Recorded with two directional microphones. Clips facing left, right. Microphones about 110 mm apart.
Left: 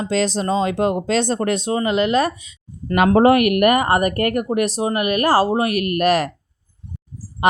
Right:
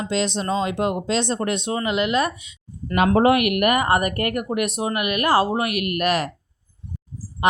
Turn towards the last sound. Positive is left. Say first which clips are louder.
# left 3 dB
turn(degrees=65)  # may be behind; listen again after turning